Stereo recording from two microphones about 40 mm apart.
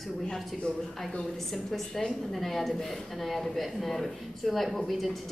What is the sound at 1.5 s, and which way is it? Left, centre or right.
A woman's voice, centre.